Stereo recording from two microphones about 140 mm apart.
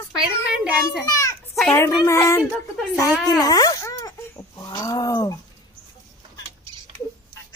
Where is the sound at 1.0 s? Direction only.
25° left (ahead or behind).